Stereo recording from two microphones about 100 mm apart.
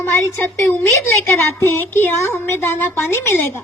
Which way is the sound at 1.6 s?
25° left (ahead or behind).